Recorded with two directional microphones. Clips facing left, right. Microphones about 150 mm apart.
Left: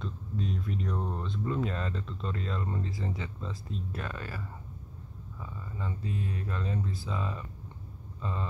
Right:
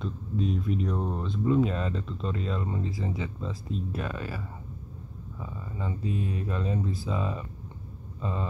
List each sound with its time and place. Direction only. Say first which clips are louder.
0.0 s speech: right 5 dB; 10° right (ahead or behind)
5.4 s speech: right 3 dB; 15° right (ahead or behind)